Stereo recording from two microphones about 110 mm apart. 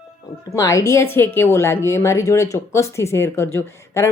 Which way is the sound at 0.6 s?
30° left (ahead or behind).